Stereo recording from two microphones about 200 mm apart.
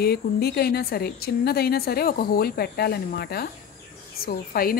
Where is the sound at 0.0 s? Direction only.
50° left (ahead or behind).